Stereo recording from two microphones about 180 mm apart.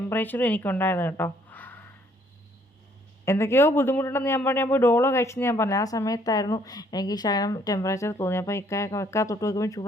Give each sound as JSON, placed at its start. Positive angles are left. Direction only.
{"t": 0.1, "sound": "a woman's voice", "side_deg": 10}
{"t": 3.2, "sound": "a man's voice", "side_deg": 15}